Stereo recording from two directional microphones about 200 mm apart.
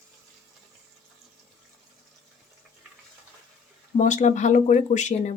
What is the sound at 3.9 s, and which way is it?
Speech, 40° left (ahead or behind).